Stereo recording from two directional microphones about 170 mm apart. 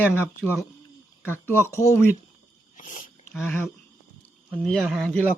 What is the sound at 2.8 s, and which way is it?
Speech, 45° left (ahead or behind).